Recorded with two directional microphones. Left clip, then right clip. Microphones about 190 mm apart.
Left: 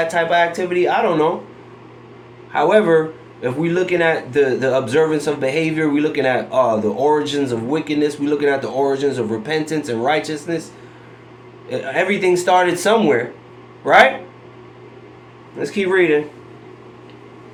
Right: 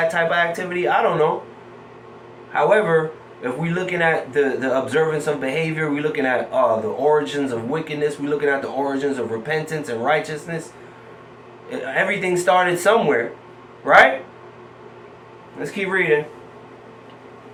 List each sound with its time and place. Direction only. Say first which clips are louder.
0.1 s speech: left 3 dB; 35° left (ahead or behind)
2.5 s speech: left 3 dB; 50° left (ahead or behind)
11.7 s speech: left 2 dB; 45° left (ahead or behind)
15.7 s speech: left 5 dB; 50° left (ahead or behind)